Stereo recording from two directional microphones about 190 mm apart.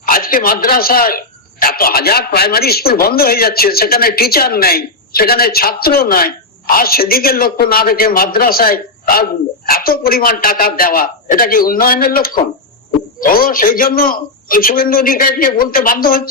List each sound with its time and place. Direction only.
0.0 s speech: 50° left (ahead or behind)